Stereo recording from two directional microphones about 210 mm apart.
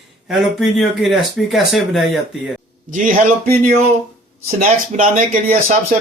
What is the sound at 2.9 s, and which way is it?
Speech, 40° right (ahead or behind).